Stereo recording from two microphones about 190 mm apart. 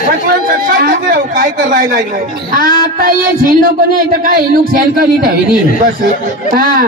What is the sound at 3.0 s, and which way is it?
A man's voice, 45° right (ahead or behind).